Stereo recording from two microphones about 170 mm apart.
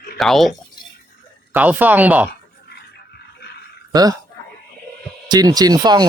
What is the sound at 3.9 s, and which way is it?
Speech, 20° right (ahead or behind).